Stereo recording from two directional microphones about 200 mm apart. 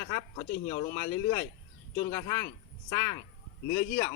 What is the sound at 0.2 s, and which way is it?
Speech, 30° left (ahead or behind).